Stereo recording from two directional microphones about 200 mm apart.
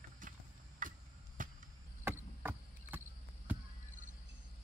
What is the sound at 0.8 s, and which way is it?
Chop, 40° right (ahead or behind).